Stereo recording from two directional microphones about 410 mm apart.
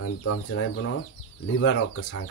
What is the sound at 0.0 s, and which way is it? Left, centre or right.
Speech, left.